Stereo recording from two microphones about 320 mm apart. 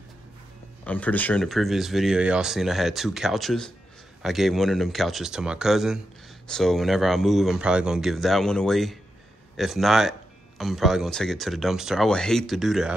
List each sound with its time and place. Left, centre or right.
0.8 s speech: centre